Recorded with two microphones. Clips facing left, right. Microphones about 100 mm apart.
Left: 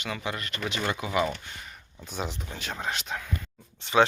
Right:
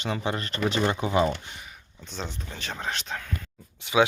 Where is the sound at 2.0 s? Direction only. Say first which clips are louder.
Left 2 dB; 10° left (ahead or behind).